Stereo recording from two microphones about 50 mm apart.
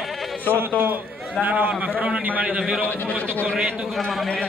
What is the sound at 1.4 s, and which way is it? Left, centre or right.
Speech, right.